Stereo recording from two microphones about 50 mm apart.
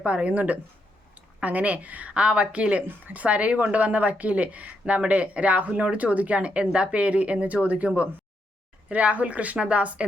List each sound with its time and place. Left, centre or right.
0.0 s a woman's voice: right